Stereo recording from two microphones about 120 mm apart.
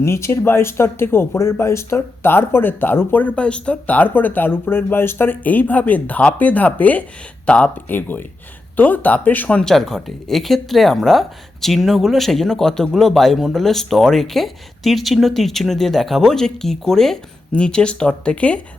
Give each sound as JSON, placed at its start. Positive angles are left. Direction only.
{"t": 0.0, "sound": "speech", "side_deg": 20}